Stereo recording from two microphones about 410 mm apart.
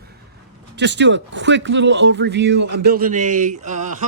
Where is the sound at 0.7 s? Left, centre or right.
Right.